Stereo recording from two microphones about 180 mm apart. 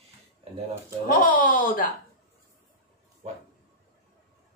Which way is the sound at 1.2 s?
50° left (ahead or behind).